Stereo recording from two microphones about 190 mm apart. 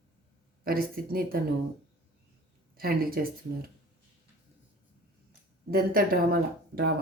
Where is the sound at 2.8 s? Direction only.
50° right (ahead or behind).